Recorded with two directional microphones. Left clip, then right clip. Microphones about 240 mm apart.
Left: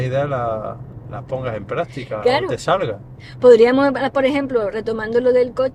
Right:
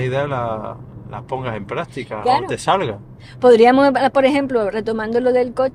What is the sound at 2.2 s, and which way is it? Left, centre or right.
Speech, centre.